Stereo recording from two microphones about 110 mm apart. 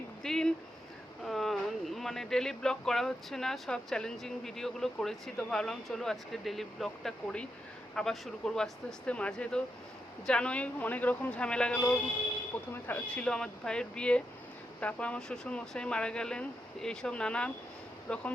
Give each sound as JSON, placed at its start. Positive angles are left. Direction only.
{"t": 0.2, "sound": "speech", "side_deg": 5}